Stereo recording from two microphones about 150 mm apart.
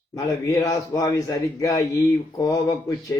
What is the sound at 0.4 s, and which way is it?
Speech, 20° left (ahead or behind).